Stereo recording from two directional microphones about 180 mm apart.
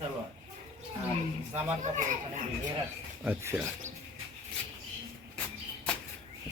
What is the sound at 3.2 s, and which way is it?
Speech, 10° right (ahead or behind).